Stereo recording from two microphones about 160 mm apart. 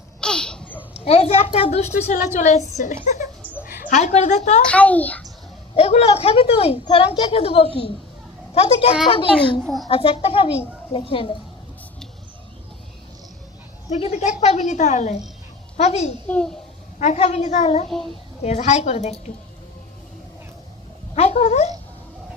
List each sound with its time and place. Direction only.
0.2 s babbling: 5° left (ahead or behind)
0.9 s a woman's voice: 40° left (ahead or behind)
4.6 s a child's voice: 10° left (ahead or behind)
5.7 s a woman's voice: 40° left (ahead or behind)
13.9 s speech: 45° left (ahead or behind)
16.2 s a child's voice: 5° left (ahead or behind)
17.0 s speech: 45° left (ahead or behind)
21.2 s speech: 40° left (ahead or behind)